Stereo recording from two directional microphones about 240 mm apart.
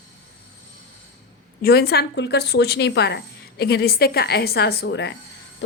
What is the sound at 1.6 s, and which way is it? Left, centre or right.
A woman's voice, left.